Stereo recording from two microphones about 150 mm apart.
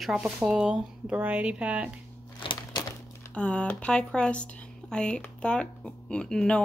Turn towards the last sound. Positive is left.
turn(degrees=5)  # may be behind; listen again after turning